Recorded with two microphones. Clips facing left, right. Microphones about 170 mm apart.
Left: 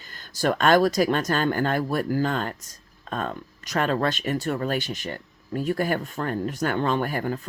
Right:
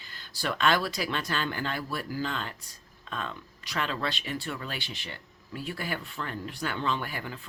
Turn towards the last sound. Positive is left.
turn(degrees=45)  # may be behind; listen again after turning